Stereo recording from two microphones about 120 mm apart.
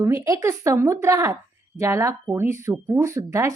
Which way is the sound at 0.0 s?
25° right (ahead or behind).